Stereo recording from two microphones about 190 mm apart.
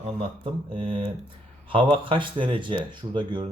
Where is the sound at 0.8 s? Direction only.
30° right (ahead or behind).